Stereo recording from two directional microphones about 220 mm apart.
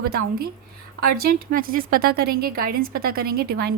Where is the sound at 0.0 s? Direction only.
45° right (ahead or behind).